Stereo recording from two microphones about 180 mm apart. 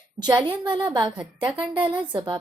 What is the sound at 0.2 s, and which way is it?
Speech, 25° right (ahead or behind).